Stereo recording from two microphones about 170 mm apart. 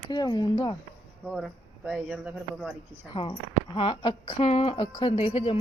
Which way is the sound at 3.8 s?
30° left (ahead or behind).